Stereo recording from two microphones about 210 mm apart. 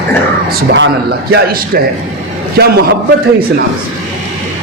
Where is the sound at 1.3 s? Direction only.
50° right (ahead or behind).